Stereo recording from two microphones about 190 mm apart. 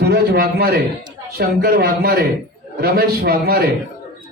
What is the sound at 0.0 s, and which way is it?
A man's voice, 55° right (ahead or behind).